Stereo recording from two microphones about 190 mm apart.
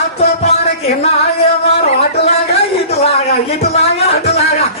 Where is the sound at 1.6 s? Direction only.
30° left (ahead or behind).